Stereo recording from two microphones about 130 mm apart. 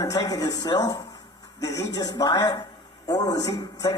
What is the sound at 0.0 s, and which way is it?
A man's voice, 30° left (ahead or behind).